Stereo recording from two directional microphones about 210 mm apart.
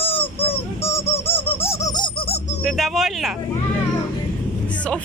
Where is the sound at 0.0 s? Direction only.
25° left (ahead or behind).